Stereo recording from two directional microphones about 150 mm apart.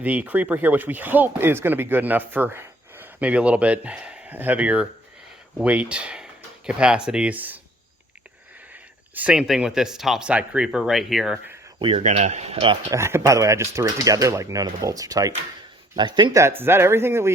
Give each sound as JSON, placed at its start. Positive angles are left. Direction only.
{"t": 0.0, "sound": "speech", "side_deg": -10}
{"t": 8.7, "sound": "speech", "side_deg": -10}
{"t": 11.8, "sound": "speech", "side_deg": -35}
{"t": 12.0, "sound": "speech", "side_deg": -50}
{"t": 12.9, "sound": "speech", "side_deg": -15}